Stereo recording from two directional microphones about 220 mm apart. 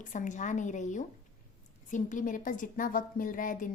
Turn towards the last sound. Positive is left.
turn(degrees=35)  # may be behind; listen again after turning